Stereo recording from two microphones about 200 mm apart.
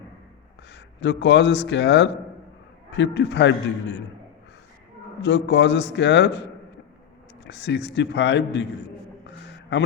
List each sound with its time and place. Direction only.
0.7 s a man's voice: 60° left (ahead or behind)
5.2 s a man's voice: 60° left (ahead or behind)
7.4 s a man's voice: 60° left (ahead or behind)
9.2 s a sound: 60° left (ahead or behind)